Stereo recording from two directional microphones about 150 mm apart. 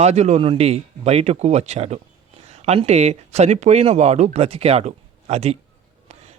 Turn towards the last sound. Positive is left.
turn(degrees=-45)  # may be behind; listen again after turning